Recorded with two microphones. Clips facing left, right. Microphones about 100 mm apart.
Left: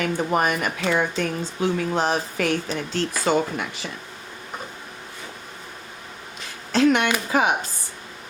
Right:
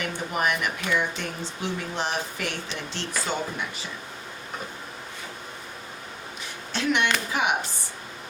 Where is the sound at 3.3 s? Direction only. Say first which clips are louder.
Left 10 dB; 80° left.